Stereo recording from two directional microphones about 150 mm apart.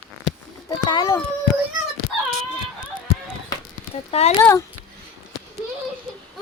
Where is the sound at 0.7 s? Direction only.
30° left (ahead or behind).